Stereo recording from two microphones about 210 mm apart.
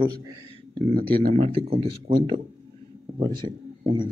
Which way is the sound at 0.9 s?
45° right (ahead or behind).